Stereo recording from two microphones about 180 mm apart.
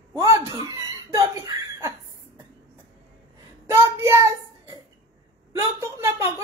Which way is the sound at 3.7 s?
15° right (ahead or behind).